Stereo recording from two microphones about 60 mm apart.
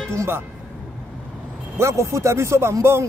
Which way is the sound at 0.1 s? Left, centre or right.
Right.